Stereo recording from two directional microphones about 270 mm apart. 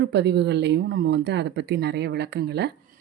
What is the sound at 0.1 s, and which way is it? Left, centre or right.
A woman's voice, right.